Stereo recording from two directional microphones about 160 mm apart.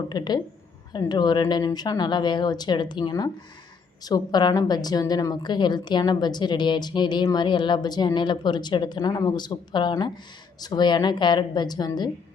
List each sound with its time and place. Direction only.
0.1 s a woman's voice: 25° left (ahead or behind)